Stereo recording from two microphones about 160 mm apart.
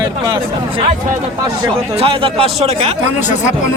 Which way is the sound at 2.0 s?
35° right (ahead or behind).